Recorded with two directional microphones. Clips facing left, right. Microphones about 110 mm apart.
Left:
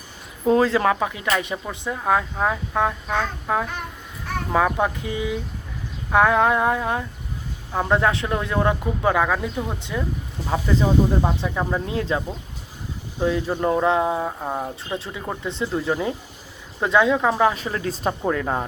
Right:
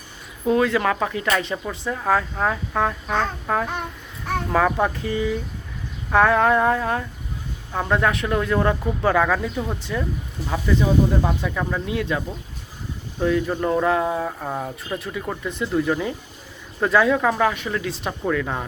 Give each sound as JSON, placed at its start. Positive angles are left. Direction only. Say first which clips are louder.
{"t": 0.4, "sound": "speech", "louder": "left 1 dB", "side_deg": 30}
{"t": 0.9, "sound": "speech", "louder": "even", "side_deg": 15}
{"t": 10.5, "sound": "speech", "louder": "even", "side_deg": 25}
{"t": 13.2, "sound": "speech", "louder": "even", "side_deg": 20}